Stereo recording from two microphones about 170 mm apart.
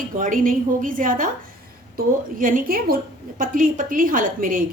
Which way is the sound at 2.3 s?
55° right (ahead or behind).